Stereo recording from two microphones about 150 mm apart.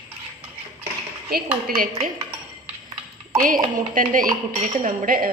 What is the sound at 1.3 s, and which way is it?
Speech, 80° right.